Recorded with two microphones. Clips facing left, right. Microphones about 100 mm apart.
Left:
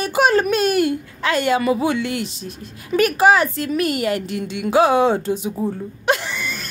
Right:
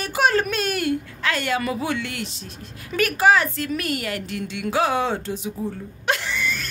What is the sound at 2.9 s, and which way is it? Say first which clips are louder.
A woman's voice: left 4 dB; 15° left (ahead or behind).